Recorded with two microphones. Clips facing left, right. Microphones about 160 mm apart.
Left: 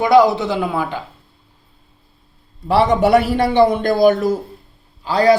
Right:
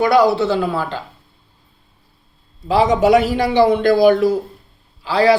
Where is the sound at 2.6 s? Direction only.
60° left (ahead or behind).